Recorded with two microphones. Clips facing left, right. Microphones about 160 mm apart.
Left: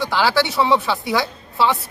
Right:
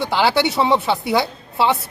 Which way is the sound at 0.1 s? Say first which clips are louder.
Right 2 dB; 20° right (ahead or behind).